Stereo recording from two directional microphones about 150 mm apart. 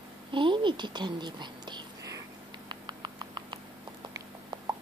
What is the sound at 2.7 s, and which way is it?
Rodents, 30° right (ahead or behind).